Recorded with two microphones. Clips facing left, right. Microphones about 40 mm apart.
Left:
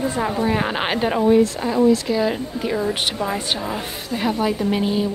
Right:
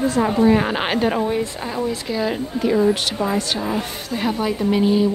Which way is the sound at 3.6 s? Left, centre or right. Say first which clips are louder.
Right 3 dB; centre.